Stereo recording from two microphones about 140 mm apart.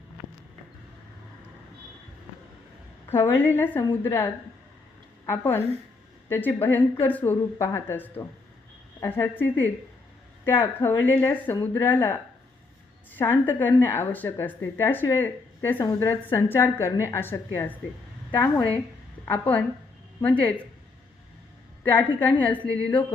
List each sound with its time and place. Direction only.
3.1 s a woman's voice: 15° left (ahead or behind)
21.8 s a woman's voice: 10° left (ahead or behind)